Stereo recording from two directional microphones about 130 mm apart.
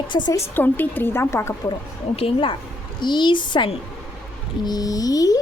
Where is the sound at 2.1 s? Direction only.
45° left (ahead or behind).